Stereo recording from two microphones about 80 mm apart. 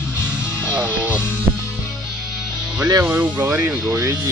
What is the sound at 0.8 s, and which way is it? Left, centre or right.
Speech, centre.